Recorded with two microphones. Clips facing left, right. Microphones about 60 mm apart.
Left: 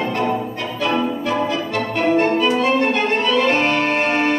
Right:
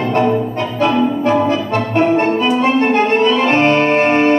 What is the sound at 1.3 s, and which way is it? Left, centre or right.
Music, right.